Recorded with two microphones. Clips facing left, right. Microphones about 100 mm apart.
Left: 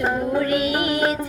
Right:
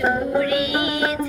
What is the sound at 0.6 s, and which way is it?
Music, 50° left (ahead or behind).